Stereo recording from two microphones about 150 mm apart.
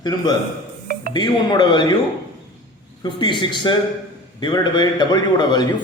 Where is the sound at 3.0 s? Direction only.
30° left (ahead or behind).